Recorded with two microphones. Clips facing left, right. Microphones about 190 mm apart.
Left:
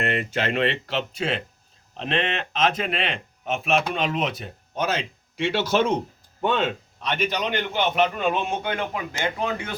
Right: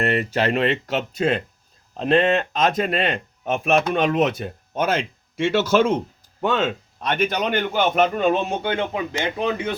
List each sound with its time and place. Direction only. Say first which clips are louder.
0.0 s speech: right 4 dB; 40° right (ahead or behind); by 9.6 s 20° right (ahead or behind)